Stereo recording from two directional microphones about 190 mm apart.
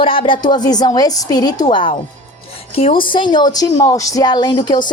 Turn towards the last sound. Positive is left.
turn(degrees=25)  # may be behind; listen again after turning